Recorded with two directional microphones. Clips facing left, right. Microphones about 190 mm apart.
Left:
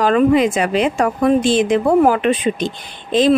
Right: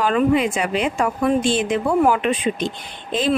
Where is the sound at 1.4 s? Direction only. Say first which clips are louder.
Left 5 dB; 90° left.